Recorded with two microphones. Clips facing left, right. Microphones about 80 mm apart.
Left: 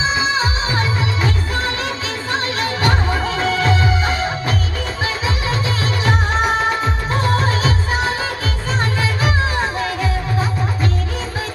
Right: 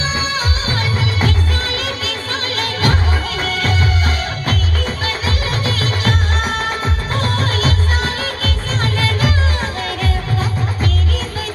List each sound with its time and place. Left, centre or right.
0.2 s music: left
2.6 s music: left